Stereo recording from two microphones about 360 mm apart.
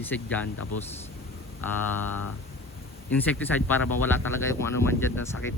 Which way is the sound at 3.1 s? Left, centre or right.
Centre.